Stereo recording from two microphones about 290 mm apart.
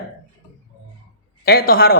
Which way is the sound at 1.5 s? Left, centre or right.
Left.